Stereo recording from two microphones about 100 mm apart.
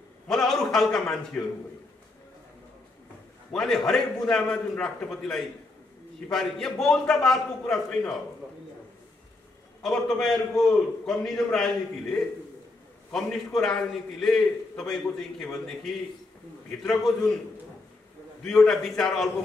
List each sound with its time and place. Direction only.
0.3 s a sound: 5° left (ahead or behind)
3.5 s a man's voice: 5° left (ahead or behind)
9.8 s a man's voice: 5° left (ahead or behind)
18.4 s a man's voice: 5° left (ahead or behind)